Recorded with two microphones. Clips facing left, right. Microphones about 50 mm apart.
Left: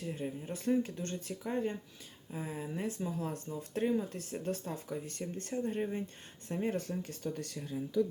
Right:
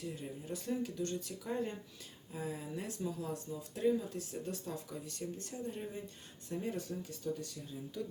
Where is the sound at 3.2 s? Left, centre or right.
Left.